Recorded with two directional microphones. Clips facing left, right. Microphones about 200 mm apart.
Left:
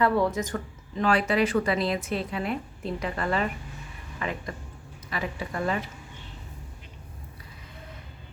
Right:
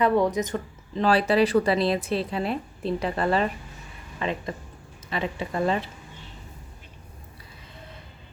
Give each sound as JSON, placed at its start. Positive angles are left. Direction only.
{"t": 0.0, "sound": "speech", "side_deg": -20}
{"t": 1.0, "sound": "a woman's voice", "side_deg": -35}